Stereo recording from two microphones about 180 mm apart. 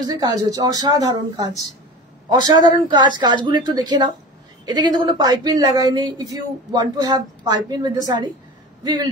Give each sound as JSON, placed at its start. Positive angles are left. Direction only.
{"t": 0.1, "sound": "a woman's voice", "side_deg": -20}